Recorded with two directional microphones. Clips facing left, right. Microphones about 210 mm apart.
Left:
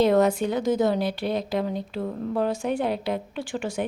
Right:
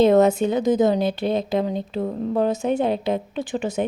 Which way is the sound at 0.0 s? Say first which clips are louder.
Right 4 dB; 25° right (ahead or behind).